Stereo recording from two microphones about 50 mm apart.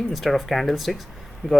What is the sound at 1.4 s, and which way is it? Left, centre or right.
Speech, centre.